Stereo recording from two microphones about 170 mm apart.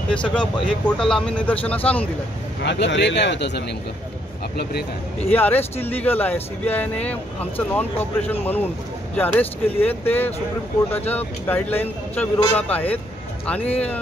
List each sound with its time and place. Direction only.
0.1 s speech: 5° left (ahead or behind)
2.6 s a man's voice: 90° left
5.3 s speech: 10° left (ahead or behind)